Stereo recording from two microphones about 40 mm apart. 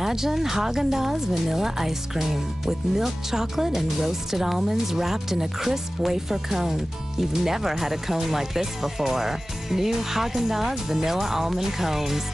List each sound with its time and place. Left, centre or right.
0.0 s speech: centre